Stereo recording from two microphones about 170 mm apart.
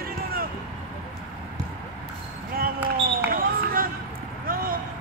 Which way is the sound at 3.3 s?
60° right (ahead or behind).